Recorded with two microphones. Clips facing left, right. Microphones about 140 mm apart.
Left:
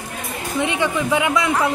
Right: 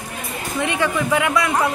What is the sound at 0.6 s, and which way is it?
Speech, 15° left (ahead or behind).